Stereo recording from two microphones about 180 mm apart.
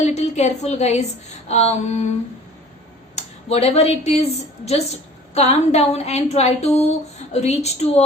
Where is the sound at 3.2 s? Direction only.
35° left (ahead or behind).